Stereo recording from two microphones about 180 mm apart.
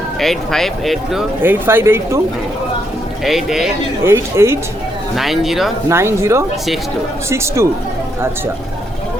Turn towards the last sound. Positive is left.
turn(degrees=-15)  # may be behind; listen again after turning